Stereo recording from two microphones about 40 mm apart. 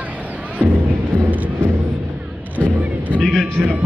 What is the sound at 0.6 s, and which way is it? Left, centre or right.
Music, right.